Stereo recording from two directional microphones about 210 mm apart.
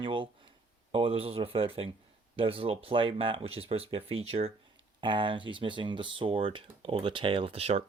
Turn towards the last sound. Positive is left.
turn(degrees=-30)  # may be behind; listen again after turning